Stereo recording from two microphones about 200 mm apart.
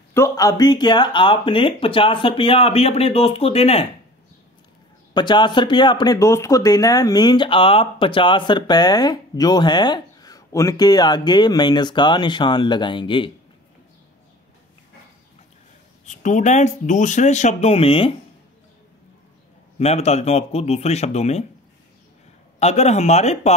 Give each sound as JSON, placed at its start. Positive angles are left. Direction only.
{"t": 0.1, "sound": "speech", "side_deg": 15}
{"t": 5.1, "sound": "speech", "side_deg": 25}
{"t": 16.1, "sound": "speech", "side_deg": 35}
{"t": 19.8, "sound": "speech", "side_deg": 30}
{"t": 22.6, "sound": "speech", "side_deg": 35}